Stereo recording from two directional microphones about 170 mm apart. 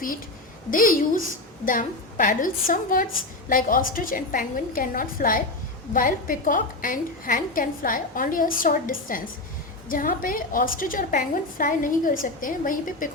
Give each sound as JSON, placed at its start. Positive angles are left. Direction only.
{"t": 0.7, "sound": "a woman's voice", "side_deg": 55}